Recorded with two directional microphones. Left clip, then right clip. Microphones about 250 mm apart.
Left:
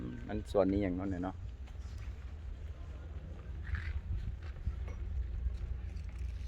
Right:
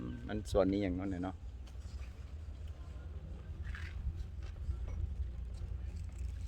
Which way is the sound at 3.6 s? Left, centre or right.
Right.